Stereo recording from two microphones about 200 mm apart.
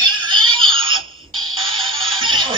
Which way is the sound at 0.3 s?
25° right (ahead or behind).